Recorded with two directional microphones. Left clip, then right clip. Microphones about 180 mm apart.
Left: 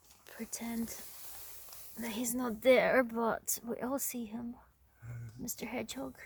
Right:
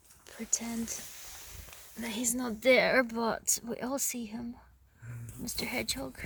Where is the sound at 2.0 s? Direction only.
5° right (ahead or behind).